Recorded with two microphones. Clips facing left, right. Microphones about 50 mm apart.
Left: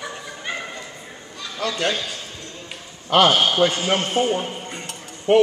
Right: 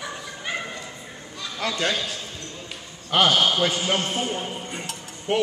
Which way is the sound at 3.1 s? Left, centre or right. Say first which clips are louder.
Left 3 dB; left.